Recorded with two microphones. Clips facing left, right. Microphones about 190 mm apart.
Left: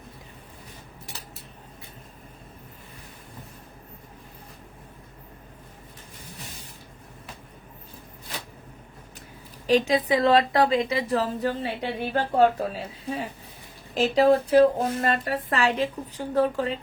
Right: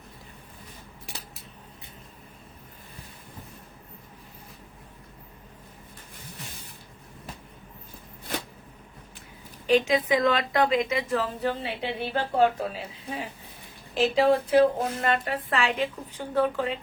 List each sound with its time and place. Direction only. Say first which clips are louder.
9.6 s a woman's voice: left 1 dB; 35° left (ahead or behind)